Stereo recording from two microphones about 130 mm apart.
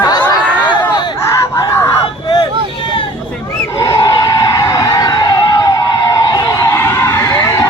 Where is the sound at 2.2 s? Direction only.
35° left (ahead or behind).